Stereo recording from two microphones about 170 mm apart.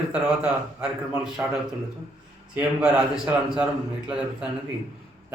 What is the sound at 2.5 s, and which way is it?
A man's voice, 5° right (ahead or behind).